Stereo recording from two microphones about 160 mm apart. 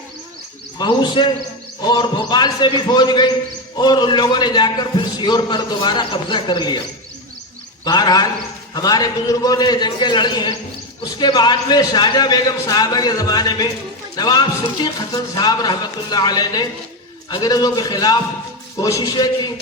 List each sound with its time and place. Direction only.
0.8 s a man's voice: 30° left (ahead or behind)
7.9 s a man's voice: 25° left (ahead or behind)